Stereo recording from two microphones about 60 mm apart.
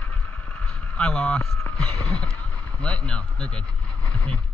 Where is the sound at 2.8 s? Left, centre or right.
Centre.